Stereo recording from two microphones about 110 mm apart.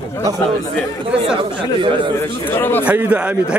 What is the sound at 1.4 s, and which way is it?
Speech, 50° right (ahead or behind).